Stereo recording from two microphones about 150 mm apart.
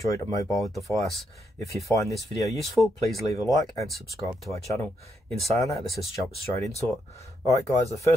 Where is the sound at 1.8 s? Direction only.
20° left (ahead or behind).